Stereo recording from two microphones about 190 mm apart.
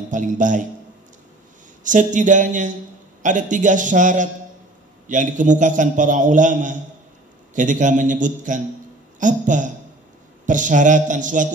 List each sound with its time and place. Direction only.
0.1 s a man's voice: 40° right (ahead or behind)
1.8 s a man's voice: 40° right (ahead or behind)